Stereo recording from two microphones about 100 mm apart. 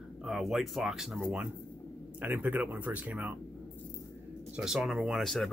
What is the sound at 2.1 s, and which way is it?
A man's voice, 20° right (ahead or behind).